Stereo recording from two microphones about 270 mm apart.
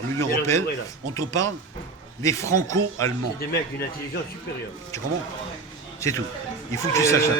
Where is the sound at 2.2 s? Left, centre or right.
Centre.